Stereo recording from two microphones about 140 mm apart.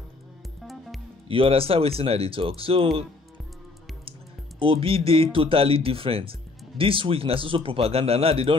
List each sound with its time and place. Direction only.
0.7 s music: centre (ahead or behind)
1.3 s speech: 40° right (ahead or behind)
4.6 s speech: 40° right (ahead or behind)